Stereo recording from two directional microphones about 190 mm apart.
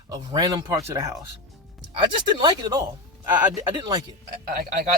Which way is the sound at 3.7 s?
20° right (ahead or behind).